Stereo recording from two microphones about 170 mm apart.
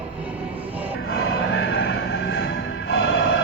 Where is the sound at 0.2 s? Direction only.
10° right (ahead or behind).